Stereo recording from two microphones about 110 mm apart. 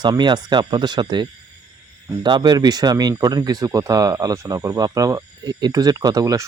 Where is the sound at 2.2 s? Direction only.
45° right (ahead or behind).